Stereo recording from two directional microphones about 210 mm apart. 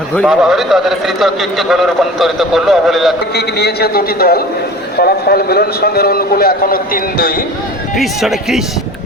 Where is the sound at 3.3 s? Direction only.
50° left (ahead or behind).